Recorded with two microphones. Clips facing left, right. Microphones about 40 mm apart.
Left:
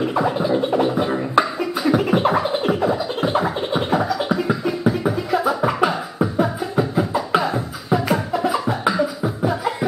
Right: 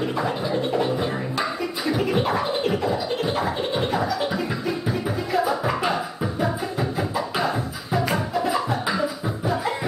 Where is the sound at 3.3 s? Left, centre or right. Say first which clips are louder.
Left 4 dB; centre.